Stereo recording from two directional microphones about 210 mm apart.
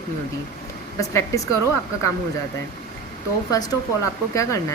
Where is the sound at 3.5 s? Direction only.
15° left (ahead or behind).